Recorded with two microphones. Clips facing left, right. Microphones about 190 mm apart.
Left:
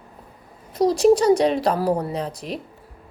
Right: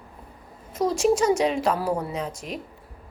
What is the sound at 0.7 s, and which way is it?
A woman's voice, 35° left (ahead or behind).